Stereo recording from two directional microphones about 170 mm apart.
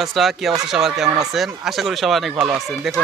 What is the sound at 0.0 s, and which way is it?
Speech, centre (ahead or behind).